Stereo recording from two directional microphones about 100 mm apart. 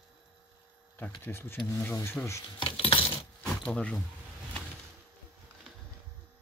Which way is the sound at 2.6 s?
65° left (ahead or behind).